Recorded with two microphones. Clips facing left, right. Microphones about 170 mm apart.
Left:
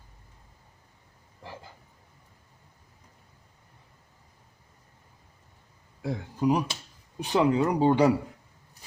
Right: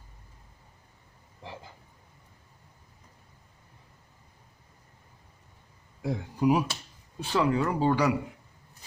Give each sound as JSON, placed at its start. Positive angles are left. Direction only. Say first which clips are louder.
{"t": 6.1, "sound": "speech", "louder": "right 1 dB", "side_deg": -10}
{"t": 7.2, "sound": "speech", "louder": "left 3 dB", "side_deg": 20}